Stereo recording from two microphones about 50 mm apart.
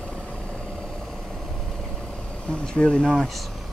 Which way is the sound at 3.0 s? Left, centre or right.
Centre.